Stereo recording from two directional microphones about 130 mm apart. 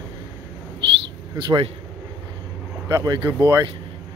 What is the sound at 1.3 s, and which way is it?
Speech, 40° right (ahead or behind).